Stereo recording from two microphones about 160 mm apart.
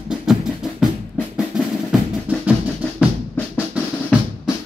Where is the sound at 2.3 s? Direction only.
10° right (ahead or behind).